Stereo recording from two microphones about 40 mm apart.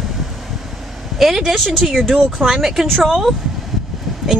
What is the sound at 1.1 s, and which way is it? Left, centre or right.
Speech, centre.